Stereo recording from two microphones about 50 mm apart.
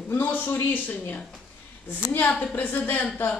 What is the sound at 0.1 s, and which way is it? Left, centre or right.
Speech, left.